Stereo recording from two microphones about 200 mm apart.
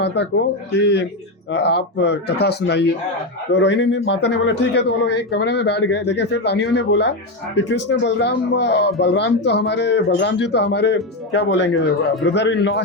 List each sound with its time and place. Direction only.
0.8 s speech: 55° left (ahead or behind)